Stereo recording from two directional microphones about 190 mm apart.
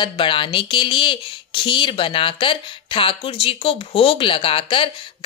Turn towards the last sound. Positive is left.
turn(degrees=25)  # may be behind; listen again after turning